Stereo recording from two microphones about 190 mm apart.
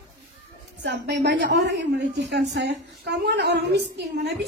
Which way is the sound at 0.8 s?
65° right (ahead or behind).